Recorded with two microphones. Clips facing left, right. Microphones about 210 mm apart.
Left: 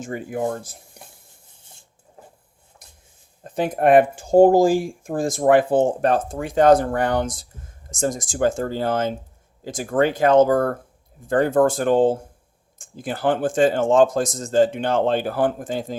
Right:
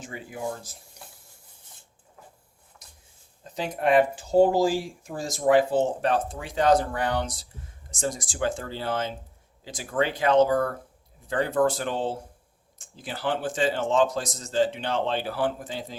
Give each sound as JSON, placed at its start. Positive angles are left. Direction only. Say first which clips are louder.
{"t": 0.0, "sound": "speech", "louder": "left 8 dB", "side_deg": 50}
{"t": 2.8, "sound": "a sound", "louder": "left 3 dB", "side_deg": 55}
{"t": 3.4, "sound": "speech", "louder": "left 7 dB", "side_deg": 55}